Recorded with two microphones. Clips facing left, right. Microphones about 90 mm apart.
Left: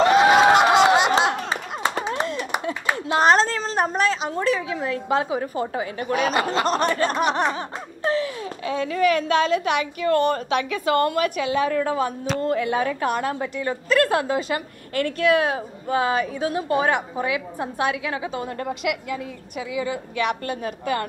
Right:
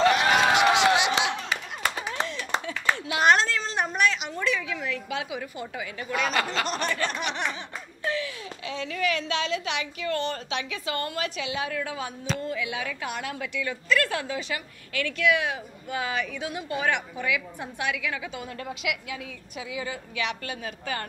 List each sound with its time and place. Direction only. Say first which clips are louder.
0.4 s a sound: left 6 dB; 40° left (ahead or behind)
3.1 s a sound: left 4 dB; 35° left (ahead or behind)
4.4 s a woman's voice: left 5 dB; 35° left (ahead or behind)
6.0 s laughter: left 5 dB; 50° left (ahead or behind)
12.4 s a woman's voice: left 12 dB; 50° left (ahead or behind); by 18.4 s 30° left (ahead or behind)
18.4 s laughter: left 7 dB; 50° left (ahead or behind)